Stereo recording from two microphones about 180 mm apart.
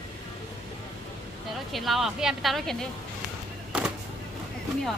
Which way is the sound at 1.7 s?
Centre (ahead or behind).